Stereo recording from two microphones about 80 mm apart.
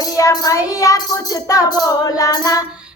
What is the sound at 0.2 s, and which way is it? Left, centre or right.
Child singing, left.